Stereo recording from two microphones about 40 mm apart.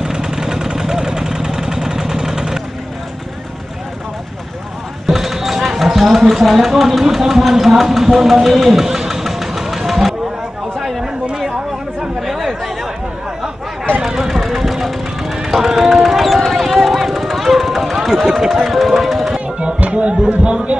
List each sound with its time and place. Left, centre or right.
0.0 s vehicle: centre
5.0 s a sound: centre
7.2 s music: centre
10.8 s chatter: centre
12.2 s chatter: centre
14.0 s a sound: centre
19.8 s speech: right